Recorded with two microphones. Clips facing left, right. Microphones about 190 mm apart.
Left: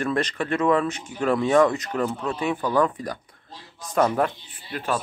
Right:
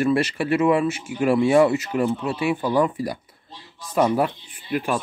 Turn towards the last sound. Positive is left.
turn(degrees=-10)  # may be behind; listen again after turning